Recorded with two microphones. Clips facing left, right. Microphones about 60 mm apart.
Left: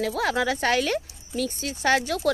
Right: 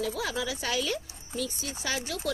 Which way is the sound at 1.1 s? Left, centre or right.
Right.